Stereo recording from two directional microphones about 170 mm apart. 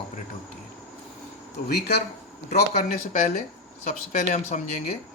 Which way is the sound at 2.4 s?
45° left (ahead or behind).